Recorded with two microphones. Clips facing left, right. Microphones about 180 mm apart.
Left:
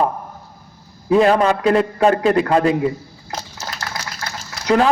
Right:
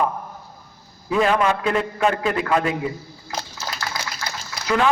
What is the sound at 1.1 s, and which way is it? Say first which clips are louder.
A man's voice: left 5 dB; 35° left (ahead or behind).